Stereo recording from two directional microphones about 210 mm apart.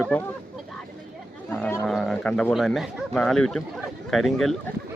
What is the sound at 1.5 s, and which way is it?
Speech, 5° left (ahead or behind).